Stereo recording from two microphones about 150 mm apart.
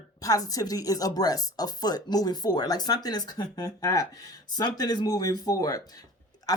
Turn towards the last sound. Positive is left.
turn(degrees=25)  # may be behind; listen again after turning